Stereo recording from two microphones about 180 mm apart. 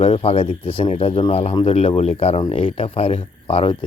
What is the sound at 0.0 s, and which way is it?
Speech, 35° left (ahead or behind).